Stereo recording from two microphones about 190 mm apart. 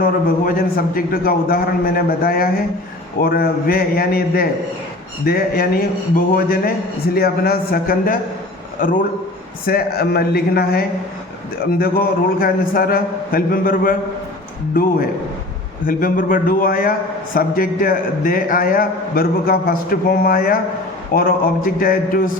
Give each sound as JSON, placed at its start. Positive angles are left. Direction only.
{"t": 0.0, "sound": "a man's voice", "side_deg": 50}
{"t": 15.9, "sound": "a man's voice", "side_deg": 45}